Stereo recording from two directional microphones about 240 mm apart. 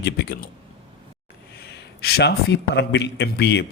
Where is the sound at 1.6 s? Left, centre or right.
Left.